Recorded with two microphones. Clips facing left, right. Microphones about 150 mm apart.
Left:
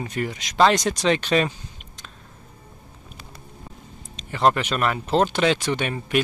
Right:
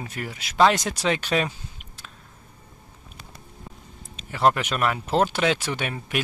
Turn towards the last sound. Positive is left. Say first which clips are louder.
# left 5 dB
turn(degrees=-5)  # may be behind; listen again after turning